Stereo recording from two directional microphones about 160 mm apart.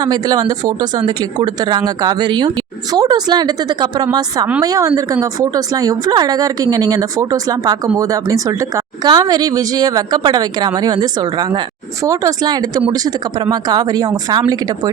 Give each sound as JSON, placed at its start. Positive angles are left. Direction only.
{"t": 0.0, "sound": "a woman's voice", "side_deg": -25}